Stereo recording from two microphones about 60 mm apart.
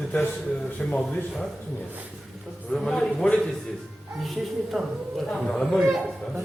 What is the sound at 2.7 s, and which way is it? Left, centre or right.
Speech, centre.